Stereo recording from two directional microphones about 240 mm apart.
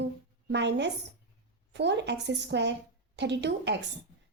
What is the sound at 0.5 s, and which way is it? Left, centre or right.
A woman's voice, right.